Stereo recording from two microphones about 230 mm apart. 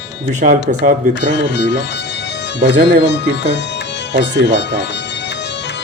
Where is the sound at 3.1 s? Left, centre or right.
Left.